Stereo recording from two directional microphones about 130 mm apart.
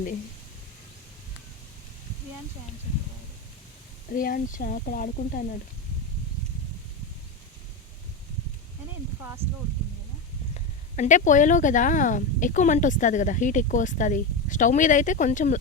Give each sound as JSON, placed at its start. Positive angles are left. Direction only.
{"t": 4.1, "sound": "speech", "side_deg": 90}
{"t": 10.5, "sound": "speech", "side_deg": 65}